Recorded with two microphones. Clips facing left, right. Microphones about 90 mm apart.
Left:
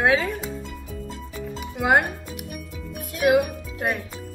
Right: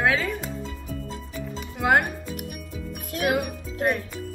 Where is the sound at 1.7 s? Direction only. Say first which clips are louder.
Left 1 dB; 5° left (ahead or behind).